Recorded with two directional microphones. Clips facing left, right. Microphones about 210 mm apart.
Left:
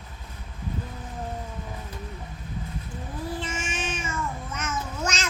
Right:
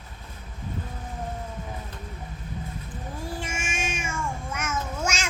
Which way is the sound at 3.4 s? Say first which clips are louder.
Left 1 dB; 10° right (ahead or behind).